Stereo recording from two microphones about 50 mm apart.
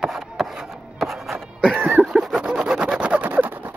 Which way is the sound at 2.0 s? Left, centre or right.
Centre.